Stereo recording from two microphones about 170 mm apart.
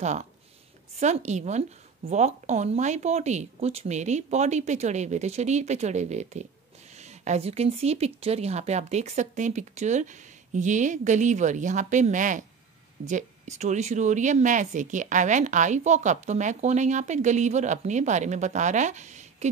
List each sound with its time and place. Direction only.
0.0 s speech: 45° right (ahead or behind)